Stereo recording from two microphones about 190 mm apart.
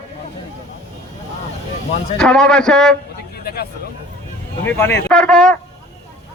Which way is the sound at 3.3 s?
55° left (ahead or behind).